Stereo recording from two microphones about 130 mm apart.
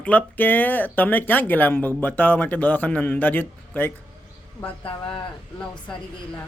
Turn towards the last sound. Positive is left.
turn(degrees=10)  # may be behind; listen again after turning